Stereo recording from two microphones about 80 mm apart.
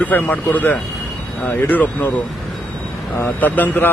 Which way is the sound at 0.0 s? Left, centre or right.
Left.